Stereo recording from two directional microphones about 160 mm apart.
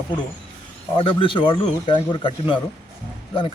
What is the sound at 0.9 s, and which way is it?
A man's voice, 30° left (ahead or behind).